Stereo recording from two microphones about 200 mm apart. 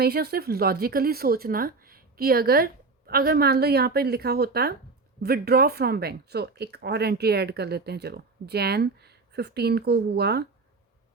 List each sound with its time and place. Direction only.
0.0 s speech: 50° right (ahead or behind)